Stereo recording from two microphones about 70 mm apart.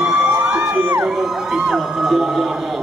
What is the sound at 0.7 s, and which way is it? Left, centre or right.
Music, right.